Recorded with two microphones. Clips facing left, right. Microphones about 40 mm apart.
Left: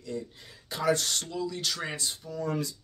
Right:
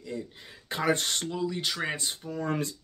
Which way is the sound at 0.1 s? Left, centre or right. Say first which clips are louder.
Left 1 dB; centre.